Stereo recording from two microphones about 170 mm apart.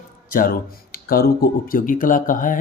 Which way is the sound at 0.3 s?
55° left (ahead or behind).